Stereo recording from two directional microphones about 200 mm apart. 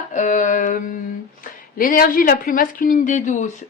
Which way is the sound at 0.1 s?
40° left (ahead or behind).